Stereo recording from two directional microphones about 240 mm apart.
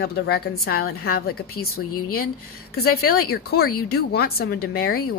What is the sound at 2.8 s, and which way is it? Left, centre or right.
Speech, left.